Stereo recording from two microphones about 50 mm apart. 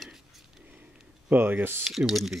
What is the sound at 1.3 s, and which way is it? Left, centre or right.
Speech, right.